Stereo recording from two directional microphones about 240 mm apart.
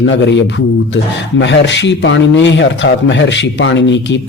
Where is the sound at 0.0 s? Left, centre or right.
Left.